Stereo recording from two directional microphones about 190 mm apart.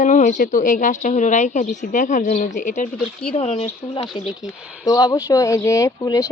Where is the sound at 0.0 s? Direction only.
40° left (ahead or behind).